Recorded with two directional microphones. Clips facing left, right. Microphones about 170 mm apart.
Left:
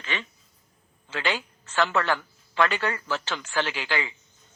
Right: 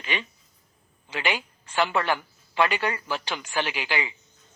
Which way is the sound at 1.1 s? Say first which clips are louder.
Even; 15° right (ahead or behind).